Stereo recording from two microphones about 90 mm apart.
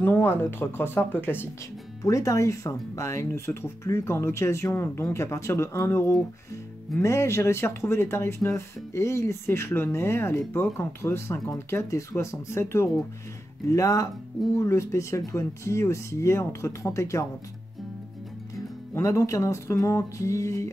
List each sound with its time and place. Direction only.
0.0 s speech: 25° left (ahead or behind)
2.0 s speech: 35° left (ahead or behind)
18.9 s speech: 35° left (ahead or behind)